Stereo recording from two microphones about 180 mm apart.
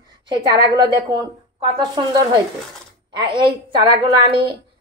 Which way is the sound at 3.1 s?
25° right (ahead or behind).